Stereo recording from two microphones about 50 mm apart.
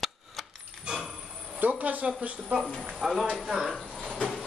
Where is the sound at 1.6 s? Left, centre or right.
Right.